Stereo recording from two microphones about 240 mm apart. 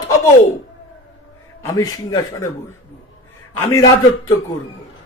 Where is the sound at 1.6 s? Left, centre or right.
Centre.